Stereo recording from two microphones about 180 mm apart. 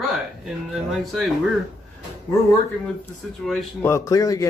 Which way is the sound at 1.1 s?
Centre (ahead or behind).